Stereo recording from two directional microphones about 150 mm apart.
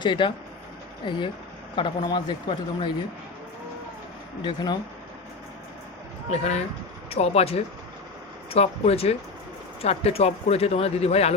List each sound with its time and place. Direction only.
0.0 s speech: 30° left (ahead or behind)
4.4 s speech: 30° left (ahead or behind)
6.3 s speech: 45° left (ahead or behind)